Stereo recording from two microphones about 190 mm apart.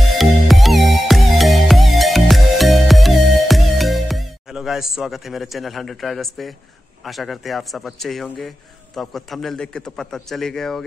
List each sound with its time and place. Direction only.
0.2 s music: centre (ahead or behind)
7.1 s speech: centre (ahead or behind)